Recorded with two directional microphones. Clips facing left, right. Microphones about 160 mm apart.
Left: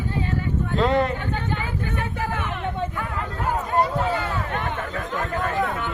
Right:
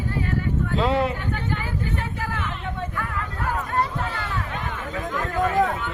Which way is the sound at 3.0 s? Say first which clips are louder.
Left 1 dB; 20° left (ahead or behind).